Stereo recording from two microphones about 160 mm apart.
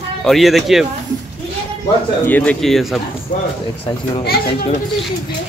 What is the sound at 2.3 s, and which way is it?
Speech, 10° left (ahead or behind).